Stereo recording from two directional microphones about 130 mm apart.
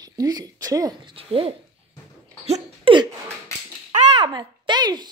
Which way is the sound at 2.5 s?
55° right (ahead or behind).